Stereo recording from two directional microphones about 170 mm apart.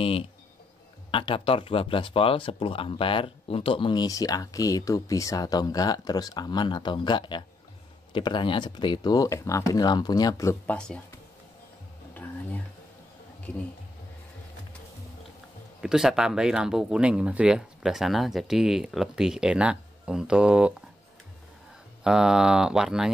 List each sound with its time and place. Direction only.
0.0 s speech: 35° left (ahead or behind); by 10.8 s 15° left (ahead or behind)
12.1 s a sound: 10° left (ahead or behind)
15.8 s speech: 5° right (ahead or behind)
22.0 s speech: 5° right (ahead or behind)